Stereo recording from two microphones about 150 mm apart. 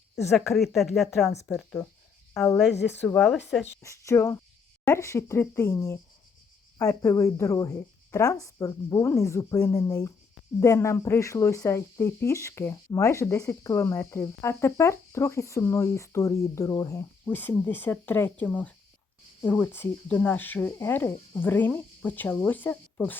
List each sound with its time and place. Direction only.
0.3 s speech: centre (ahead or behind)
2.4 s speech: centre (ahead or behind)
3.8 s speech: 20° left (ahead or behind)
17.2 s speech: 10° left (ahead or behind)